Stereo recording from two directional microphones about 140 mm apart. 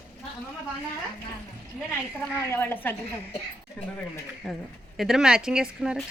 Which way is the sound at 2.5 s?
15° left (ahead or behind).